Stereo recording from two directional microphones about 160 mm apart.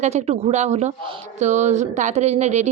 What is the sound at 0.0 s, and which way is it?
A woman's voice, 45° right (ahead or behind).